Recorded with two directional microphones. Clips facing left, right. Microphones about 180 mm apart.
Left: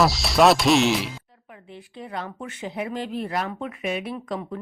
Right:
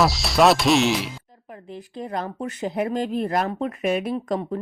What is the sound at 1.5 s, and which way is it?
Speech, 40° right (ahead or behind).